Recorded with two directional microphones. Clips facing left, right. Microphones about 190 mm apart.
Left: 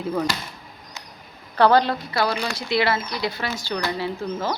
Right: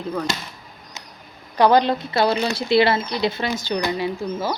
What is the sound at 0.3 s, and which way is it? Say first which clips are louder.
Speech: right 2 dB; 20° right (ahead or behind).